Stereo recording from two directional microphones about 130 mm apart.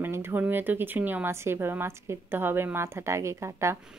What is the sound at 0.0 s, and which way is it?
A woman's voice, 20° right (ahead or behind).